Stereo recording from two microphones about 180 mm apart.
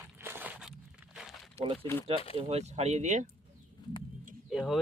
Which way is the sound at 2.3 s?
35° right (ahead or behind).